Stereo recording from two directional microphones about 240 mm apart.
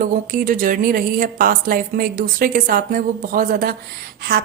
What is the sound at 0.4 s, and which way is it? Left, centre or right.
Speech, right.